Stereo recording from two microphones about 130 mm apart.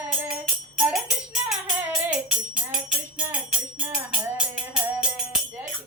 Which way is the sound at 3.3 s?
5° right (ahead or behind).